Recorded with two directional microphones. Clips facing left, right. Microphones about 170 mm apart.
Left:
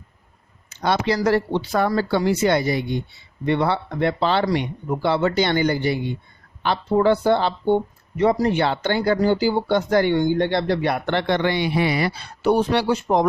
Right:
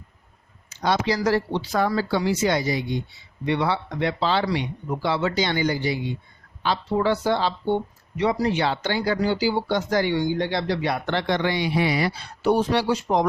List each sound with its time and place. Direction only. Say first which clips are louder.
0.8 s speech: left 2 dB; 60° left (ahead or behind)